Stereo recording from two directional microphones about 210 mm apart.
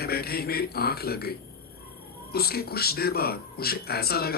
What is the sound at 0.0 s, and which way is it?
Speech, 45° left (ahead or behind).